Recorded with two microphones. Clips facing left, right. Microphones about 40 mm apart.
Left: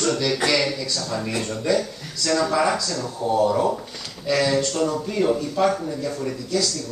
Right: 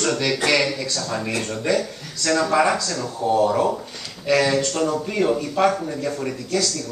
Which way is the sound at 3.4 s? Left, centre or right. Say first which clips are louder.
Even; right.